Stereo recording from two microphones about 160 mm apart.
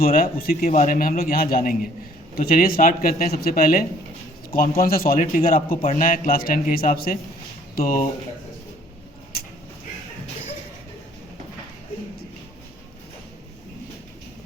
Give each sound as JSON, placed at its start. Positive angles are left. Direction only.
{"t": 0.0, "sound": "a man's voice", "side_deg": 65}
{"t": 5.8, "sound": "a man's voice", "side_deg": 50}